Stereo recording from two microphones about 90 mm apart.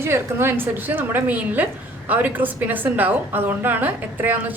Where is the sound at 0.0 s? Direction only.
25° right (ahead or behind).